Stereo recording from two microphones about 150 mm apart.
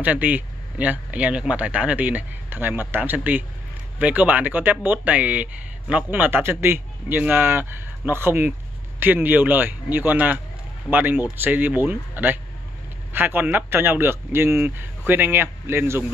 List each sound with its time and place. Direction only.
0.0 s speech: 10° right (ahead or behind)